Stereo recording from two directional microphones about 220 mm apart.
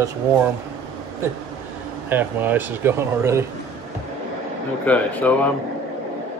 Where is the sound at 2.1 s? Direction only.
10° right (ahead or behind).